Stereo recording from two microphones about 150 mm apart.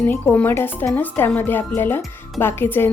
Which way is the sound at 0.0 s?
15° left (ahead or behind).